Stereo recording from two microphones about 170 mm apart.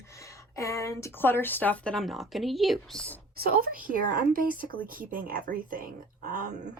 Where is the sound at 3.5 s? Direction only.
55° right (ahead or behind).